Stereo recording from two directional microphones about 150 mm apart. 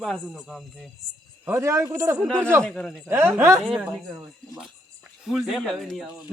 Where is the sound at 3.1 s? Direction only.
15° right (ahead or behind).